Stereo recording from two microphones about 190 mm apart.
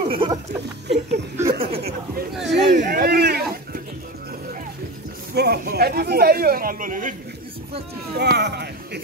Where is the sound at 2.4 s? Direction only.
60° right (ahead or behind).